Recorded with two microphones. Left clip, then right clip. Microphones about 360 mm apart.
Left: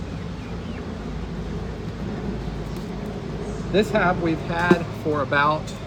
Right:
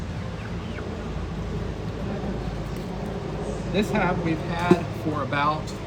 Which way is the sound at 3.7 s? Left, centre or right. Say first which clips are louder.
Left 5 dB; centre.